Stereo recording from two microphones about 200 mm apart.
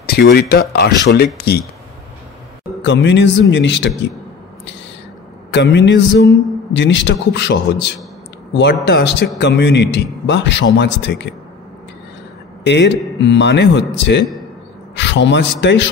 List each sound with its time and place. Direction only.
0.0 s speech: 50° left (ahead or behind)
2.8 s a man's voice: 65° left (ahead or behind)
5.5 s a man's voice: 60° left (ahead or behind)
8.8 s a man's voice: 60° left (ahead or behind)
12.6 s a man's voice: 60° left (ahead or behind)